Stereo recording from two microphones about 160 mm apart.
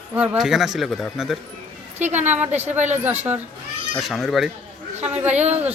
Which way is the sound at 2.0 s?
45° right (ahead or behind).